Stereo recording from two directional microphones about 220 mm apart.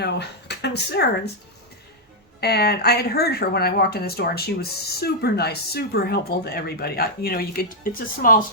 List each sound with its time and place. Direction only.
0.0 s speech: 50° left (ahead or behind)
2.4 s speech: 45° left (ahead or behind)